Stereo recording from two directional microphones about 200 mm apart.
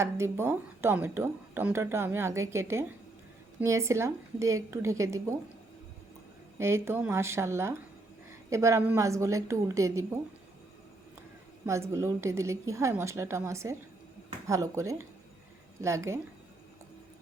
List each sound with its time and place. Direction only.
0.0 s speech: 15° right (ahead or behind)
6.6 s speech: 15° right (ahead or behind)
11.6 s speech: 15° right (ahead or behind)